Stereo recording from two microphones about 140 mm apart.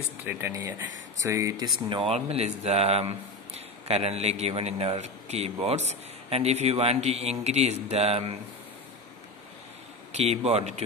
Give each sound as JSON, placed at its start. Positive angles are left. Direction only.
{"t": 0.2, "sound": "speech", "side_deg": -15}
{"t": 10.1, "sound": "speech", "side_deg": -50}